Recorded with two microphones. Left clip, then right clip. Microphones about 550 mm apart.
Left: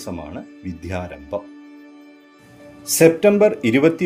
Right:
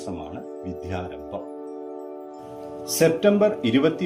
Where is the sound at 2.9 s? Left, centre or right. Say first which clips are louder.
Left 6 dB; centre.